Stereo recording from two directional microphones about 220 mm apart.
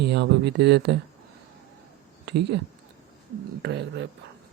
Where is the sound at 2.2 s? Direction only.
50° right (ahead or behind).